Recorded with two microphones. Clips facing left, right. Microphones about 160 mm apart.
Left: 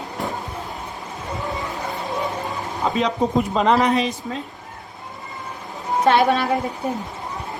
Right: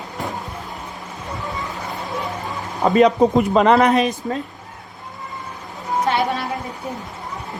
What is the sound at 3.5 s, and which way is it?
Speech, 70° right (ahead or behind).